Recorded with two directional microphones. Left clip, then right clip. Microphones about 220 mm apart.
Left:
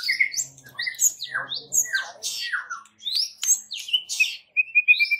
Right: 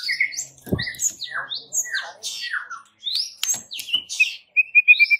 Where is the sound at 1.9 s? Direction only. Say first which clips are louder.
Left 1 dB; 30° left (ahead or behind).